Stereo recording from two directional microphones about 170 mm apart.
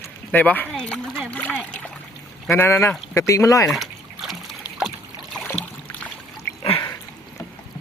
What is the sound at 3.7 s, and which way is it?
Trickle, centre (ahead or behind).